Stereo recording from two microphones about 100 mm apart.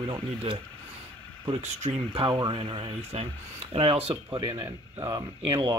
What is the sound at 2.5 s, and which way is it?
Speech, 75° right (ahead or behind).